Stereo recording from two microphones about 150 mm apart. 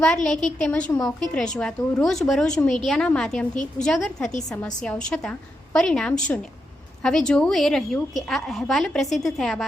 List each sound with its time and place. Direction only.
0.3 s a woman's voice: 5° left (ahead or behind)
3.5 s a woman's voice: 55° left (ahead or behind)
3.8 s a woman's voice: centre (ahead or behind)